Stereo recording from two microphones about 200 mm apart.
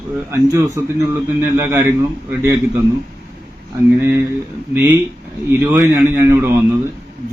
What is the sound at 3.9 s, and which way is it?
A man's voice, 10° right (ahead or behind).